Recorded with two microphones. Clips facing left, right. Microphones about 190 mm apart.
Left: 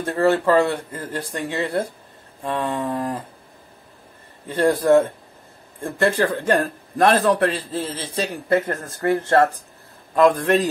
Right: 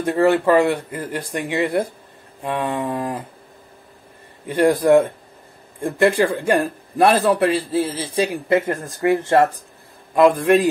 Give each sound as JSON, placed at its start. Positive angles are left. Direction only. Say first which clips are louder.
{"t": 0.0, "sound": "a man's voice", "louder": "right 2 dB", "side_deg": -15}
{"t": 4.5, "sound": "a man's voice", "louder": "right 2 dB", "side_deg": -15}